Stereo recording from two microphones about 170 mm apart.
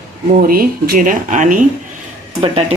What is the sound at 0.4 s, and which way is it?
Speech, 60° right (ahead or behind).